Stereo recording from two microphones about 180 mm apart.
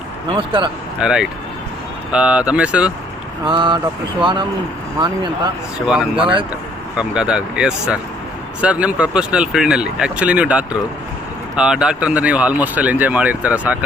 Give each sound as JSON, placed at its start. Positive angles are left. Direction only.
{"t": 0.3, "sound": "speech", "side_deg": -30}
{"t": 0.9, "sound": "speech", "side_deg": -5}
{"t": 3.4, "sound": "speech", "side_deg": -25}
{"t": 5.8, "sound": "speech", "side_deg": -5}